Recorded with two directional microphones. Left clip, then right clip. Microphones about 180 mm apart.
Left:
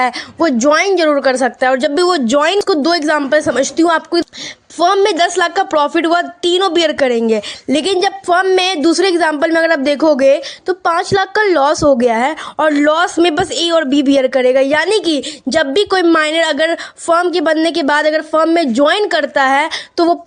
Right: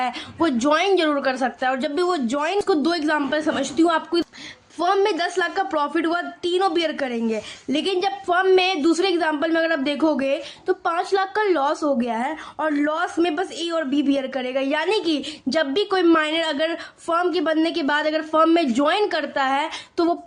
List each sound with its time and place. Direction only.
0.3 s a woman's voice: 25° left (ahead or behind)